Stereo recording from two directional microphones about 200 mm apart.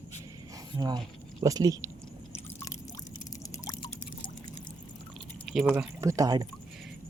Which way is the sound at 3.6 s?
20° left (ahead or behind).